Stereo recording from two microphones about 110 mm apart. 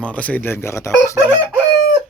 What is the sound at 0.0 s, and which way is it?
Speech, 10° left (ahead or behind).